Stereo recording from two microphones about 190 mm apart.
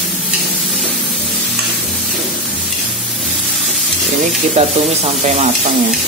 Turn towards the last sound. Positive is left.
turn(degrees=-30)  # may be behind; listen again after turning